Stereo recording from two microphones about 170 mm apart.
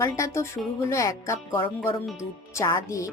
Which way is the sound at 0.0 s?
20° left (ahead or behind).